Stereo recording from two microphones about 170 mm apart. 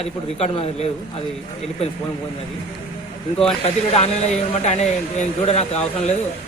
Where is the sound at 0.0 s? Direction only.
35° left (ahead or behind).